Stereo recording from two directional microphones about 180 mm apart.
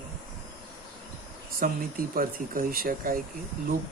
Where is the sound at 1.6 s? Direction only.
50° right (ahead or behind).